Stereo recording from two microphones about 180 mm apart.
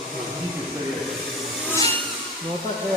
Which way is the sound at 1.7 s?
15° left (ahead or behind).